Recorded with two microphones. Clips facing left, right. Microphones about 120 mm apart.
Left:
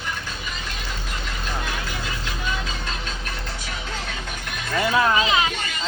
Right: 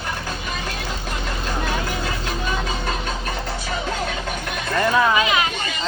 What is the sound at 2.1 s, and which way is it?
Vehicle, 60° right (ahead or behind).